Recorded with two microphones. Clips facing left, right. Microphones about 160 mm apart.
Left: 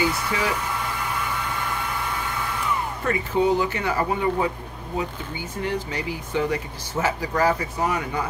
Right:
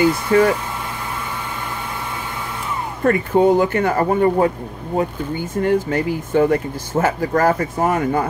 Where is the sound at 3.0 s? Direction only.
50° right (ahead or behind).